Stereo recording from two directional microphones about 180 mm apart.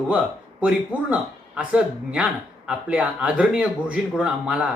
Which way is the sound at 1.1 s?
5° right (ahead or behind).